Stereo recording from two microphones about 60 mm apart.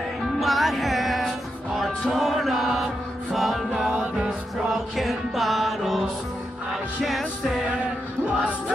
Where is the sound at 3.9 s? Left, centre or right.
Centre.